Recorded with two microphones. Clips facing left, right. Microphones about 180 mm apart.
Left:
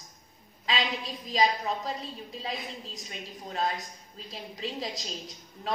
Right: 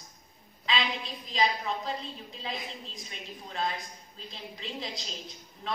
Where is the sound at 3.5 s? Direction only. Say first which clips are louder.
Left 2 dB; 40° left (ahead or behind).